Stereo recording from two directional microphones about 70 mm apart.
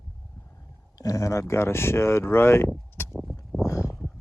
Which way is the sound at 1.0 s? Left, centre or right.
Left.